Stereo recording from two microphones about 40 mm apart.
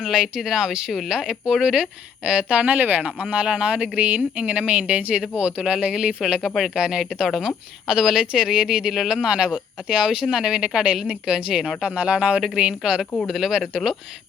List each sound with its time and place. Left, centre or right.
0.0 s speech: centre
2.7 s speech: right
13.2 s speech: centre